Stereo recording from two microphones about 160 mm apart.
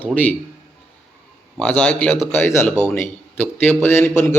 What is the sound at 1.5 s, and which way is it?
Speech, 10° left (ahead or behind).